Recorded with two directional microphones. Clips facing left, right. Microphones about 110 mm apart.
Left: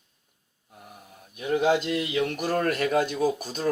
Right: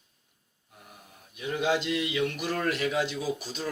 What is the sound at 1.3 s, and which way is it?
A man's voice, 45° left (ahead or behind).